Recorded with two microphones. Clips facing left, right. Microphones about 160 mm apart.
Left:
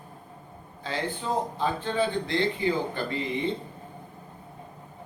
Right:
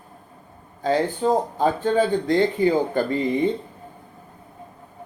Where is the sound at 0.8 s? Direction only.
45° right (ahead or behind).